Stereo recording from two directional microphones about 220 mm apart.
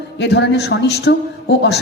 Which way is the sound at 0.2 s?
50° left (ahead or behind).